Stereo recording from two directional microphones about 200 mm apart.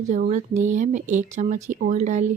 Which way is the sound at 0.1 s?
35° right (ahead or behind).